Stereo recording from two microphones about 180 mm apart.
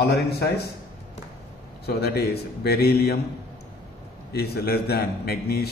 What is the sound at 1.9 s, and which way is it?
A man's voice, 60° left (ahead or behind).